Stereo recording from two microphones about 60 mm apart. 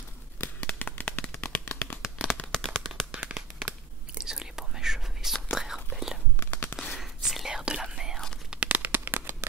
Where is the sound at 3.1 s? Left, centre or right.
Right.